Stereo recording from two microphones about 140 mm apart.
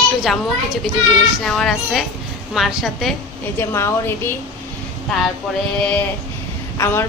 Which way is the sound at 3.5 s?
15° left (ahead or behind).